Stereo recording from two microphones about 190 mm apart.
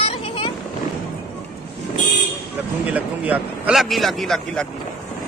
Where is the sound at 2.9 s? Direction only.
5° right (ahead or behind).